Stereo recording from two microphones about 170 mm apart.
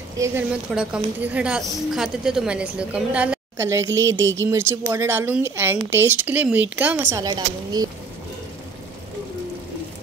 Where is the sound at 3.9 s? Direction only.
90° right.